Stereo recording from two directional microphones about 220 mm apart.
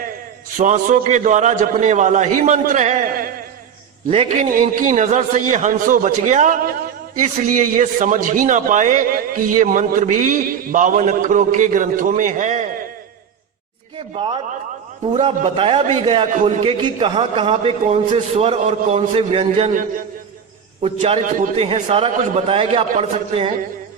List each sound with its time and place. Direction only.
0.6 s a man's voice: 35° right (ahead or behind)
4.1 s a man's voice: 25° right (ahead or behind)
4.5 s a man's voice: 35° right (ahead or behind)
15.1 s a man's voice: 25° right (ahead or behind)
20.8 s a man's voice: 25° right (ahead or behind)